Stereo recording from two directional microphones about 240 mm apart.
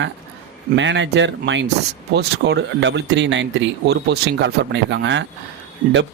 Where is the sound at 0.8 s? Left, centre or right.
Right.